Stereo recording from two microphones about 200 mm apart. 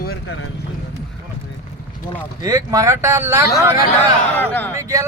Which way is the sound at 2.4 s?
15° right (ahead or behind).